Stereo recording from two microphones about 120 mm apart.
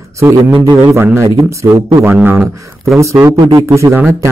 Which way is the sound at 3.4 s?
30° right (ahead or behind).